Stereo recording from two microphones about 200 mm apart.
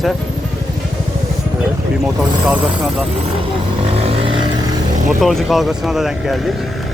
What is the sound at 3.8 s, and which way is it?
Vehicle, 30° right (ahead or behind).